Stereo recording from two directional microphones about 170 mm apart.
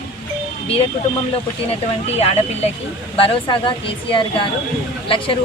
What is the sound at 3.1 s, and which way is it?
Speech, 30° left (ahead or behind).